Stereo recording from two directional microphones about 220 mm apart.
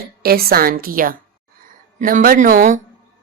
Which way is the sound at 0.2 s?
45° right (ahead or behind).